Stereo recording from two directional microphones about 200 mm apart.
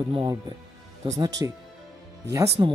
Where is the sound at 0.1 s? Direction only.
25° right (ahead or behind).